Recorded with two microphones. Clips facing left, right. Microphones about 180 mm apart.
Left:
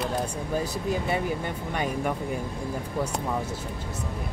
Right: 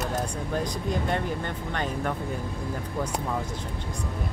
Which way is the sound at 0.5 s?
5° left (ahead or behind).